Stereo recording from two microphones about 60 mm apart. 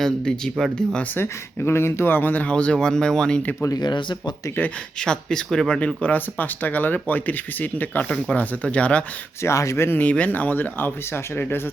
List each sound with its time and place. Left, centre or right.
0.0 s speech: centre
1.1 s speech: left
2.5 s speech: centre
4.9 s speech: centre; by 8.0 s left
8.0 s speech: centre
9.4 s speech: left
10.0 s speech: left